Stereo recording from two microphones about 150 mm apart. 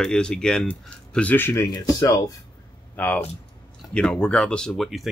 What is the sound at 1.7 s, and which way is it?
Speech, 25° left (ahead or behind).